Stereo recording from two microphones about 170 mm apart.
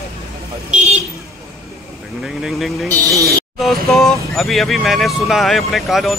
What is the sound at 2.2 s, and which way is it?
Speech, centre (ahead or behind).